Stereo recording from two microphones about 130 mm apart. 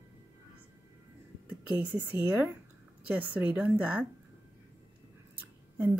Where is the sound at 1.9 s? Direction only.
15° right (ahead or behind).